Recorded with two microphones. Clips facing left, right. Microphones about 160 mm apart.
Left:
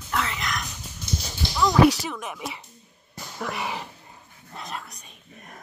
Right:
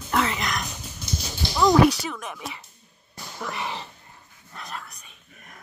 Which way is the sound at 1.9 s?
10° left (ahead or behind).